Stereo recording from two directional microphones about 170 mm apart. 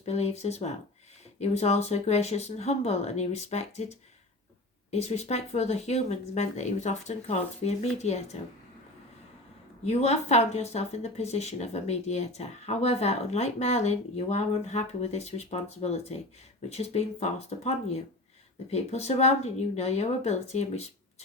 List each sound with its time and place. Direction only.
0.0 s speech: 40° left (ahead or behind)
9.8 s speech: 40° left (ahead or behind)